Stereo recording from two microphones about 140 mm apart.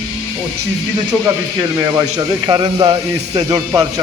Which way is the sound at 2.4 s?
30° right (ahead or behind).